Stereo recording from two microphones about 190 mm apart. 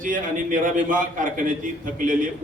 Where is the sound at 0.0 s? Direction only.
45° right (ahead or behind).